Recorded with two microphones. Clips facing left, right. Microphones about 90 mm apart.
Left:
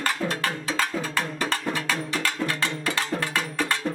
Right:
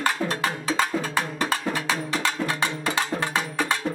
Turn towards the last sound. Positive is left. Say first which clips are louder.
# right 1 dB
turn(degrees=-20)  # may be behind; listen again after turning